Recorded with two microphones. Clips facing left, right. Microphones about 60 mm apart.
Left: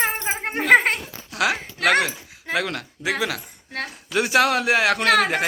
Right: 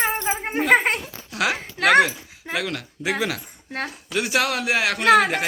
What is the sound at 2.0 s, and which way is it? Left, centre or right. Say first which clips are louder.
Speech: left 1 dB; centre.